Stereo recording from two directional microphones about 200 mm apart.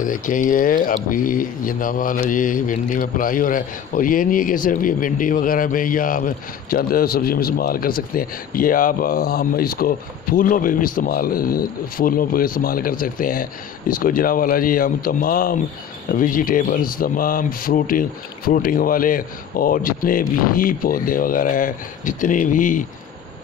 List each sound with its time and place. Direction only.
0.0 s speech: 40° left (ahead or behind)